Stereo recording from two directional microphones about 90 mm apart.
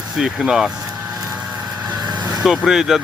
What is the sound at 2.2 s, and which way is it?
Vehicle, 10° right (ahead or behind).